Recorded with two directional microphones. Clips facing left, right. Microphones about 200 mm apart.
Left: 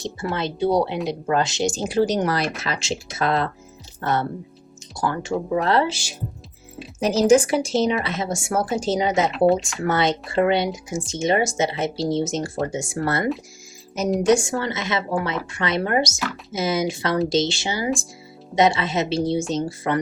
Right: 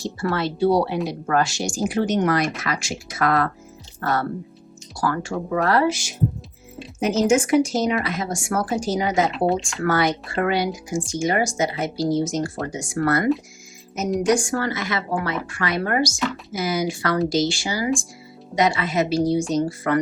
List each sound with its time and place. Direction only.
0.0 s speech: 20° left (ahead or behind)
9.3 s speech: centre (ahead or behind)
9.8 s speech: 25° left (ahead or behind)
14.3 s speech: 25° left (ahead or behind)